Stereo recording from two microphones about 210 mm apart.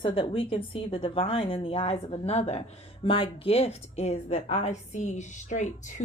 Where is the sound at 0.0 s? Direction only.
25° left (ahead or behind).